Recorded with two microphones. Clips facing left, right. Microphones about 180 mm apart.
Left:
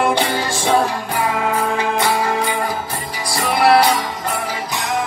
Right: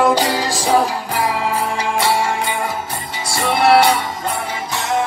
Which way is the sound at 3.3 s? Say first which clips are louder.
Right 1 dB; 25° right (ahead or behind).